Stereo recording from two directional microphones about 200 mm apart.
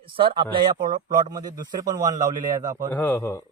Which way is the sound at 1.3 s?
20° right (ahead or behind).